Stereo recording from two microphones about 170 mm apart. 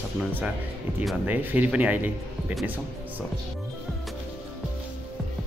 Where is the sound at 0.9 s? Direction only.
10° right (ahead or behind).